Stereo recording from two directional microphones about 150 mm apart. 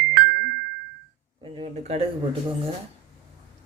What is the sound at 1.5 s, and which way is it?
Speech, 40° right (ahead or behind).